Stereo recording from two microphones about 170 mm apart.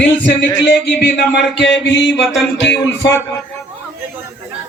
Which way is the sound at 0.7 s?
80° left.